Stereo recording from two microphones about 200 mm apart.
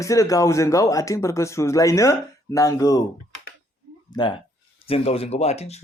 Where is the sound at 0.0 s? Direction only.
15° left (ahead or behind).